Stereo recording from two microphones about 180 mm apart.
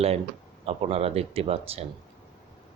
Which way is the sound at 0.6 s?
35° right (ahead or behind).